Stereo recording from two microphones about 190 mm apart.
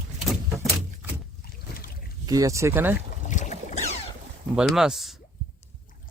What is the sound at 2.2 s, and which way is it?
Speech, 15° right (ahead or behind).